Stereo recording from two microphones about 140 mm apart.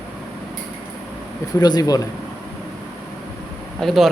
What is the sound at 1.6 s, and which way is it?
Speech, 30° left (ahead or behind).